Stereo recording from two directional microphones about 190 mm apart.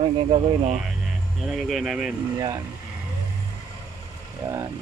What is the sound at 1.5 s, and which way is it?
Speech, centre (ahead or behind).